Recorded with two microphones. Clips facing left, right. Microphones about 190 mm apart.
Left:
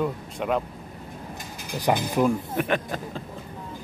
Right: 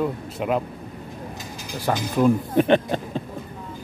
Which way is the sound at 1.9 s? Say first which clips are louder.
Left 1 dB; 15° left (ahead or behind).